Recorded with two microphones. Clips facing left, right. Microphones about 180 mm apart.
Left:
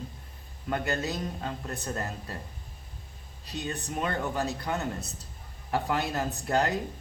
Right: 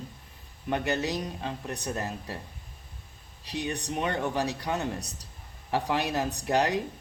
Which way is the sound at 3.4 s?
90° right.